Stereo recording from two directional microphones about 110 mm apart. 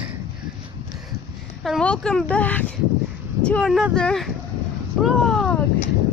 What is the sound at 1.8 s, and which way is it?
Speech, 10° left (ahead or behind).